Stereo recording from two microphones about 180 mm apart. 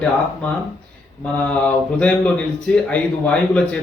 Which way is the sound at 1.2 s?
5° left (ahead or behind).